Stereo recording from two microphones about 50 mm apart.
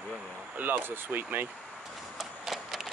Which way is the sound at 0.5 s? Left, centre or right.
Right.